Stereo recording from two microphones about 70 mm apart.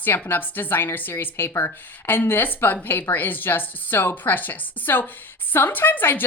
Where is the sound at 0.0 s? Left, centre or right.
Left.